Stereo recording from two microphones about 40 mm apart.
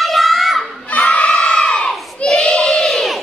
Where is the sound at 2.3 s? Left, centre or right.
Left.